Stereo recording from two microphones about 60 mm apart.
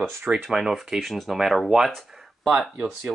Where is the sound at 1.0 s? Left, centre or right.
Centre.